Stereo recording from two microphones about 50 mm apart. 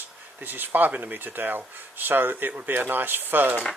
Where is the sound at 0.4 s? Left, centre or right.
Right.